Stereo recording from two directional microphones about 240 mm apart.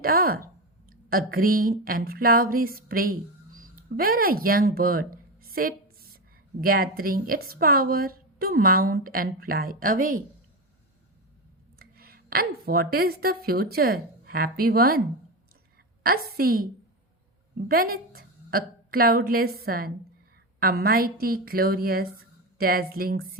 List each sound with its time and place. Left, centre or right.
0.0 s a woman's voice: right
11.8 s speech: right
16.4 s a woman's voice: right
17.7 s a woman's voice: right